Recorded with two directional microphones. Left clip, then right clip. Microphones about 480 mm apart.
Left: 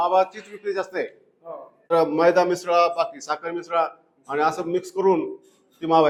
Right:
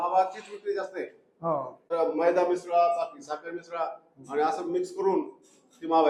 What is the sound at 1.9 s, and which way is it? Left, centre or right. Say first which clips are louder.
A man's voice: left 7 dB; left.